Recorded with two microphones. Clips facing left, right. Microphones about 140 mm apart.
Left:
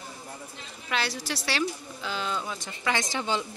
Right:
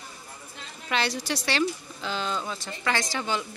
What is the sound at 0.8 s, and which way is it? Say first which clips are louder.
A woman's voice: right 3 dB; 5° left (ahead or behind).